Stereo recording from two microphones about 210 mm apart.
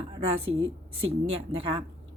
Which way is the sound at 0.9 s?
70° right (ahead or behind).